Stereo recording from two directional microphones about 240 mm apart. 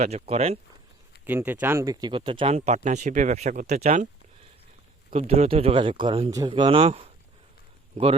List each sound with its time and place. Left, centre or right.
0.0 s speech: right
1.2 s speech: centre; by 4.1 s right
5.1 s speech: right